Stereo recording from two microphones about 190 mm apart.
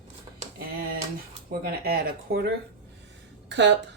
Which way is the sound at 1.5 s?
55° right (ahead or behind).